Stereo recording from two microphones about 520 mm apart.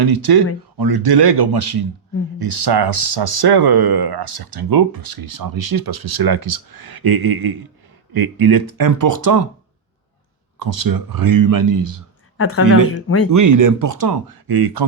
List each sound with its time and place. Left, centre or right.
0.0 s speech: right
10.8 s speech: right
12.4 s speech: left
13.3 s speech: right